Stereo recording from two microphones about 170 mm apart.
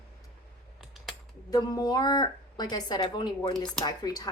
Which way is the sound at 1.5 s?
20° left (ahead or behind).